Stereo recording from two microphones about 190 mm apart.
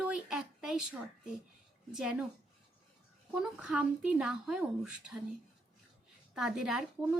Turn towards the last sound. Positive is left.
turn(degrees=-5)  # may be behind; listen again after turning